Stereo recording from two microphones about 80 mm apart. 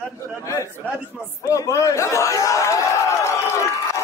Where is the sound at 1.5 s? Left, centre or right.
Left.